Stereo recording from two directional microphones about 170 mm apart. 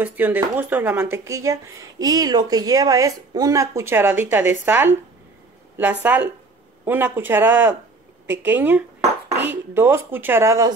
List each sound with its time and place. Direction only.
0.0 s speech: 10° right (ahead or behind)
6.0 s speech: 10° right (ahead or behind)